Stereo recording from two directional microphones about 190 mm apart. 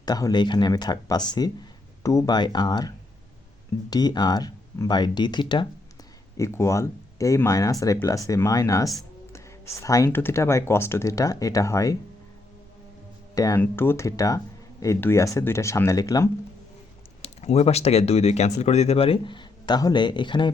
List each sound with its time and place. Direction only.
0.0 s speech: 20° left (ahead or behind)
13.3 s speech: 15° left (ahead or behind)
17.2 s speech: 35° left (ahead or behind)